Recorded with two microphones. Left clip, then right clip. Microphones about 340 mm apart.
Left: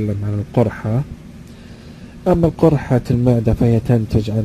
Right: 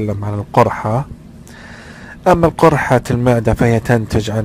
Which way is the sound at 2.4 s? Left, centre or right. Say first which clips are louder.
Right 4 dB; right.